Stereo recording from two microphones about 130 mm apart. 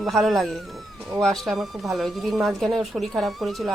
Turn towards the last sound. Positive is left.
turn(degrees=0)  # may be behind; listen again after turning